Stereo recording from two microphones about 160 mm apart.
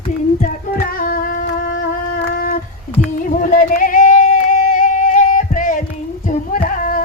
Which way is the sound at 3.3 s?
55° left (ahead or behind).